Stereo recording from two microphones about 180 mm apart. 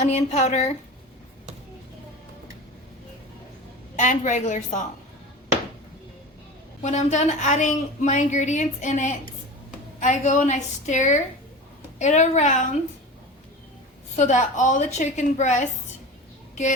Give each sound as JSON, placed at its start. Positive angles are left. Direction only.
{"t": 0.0, "sound": "a woman's voice", "side_deg": 40}
{"t": 3.9, "sound": "a woman's voice", "side_deg": 45}
{"t": 6.8, "sound": "a woman's voice", "side_deg": 40}
{"t": 14.2, "sound": "a woman's voice", "side_deg": 40}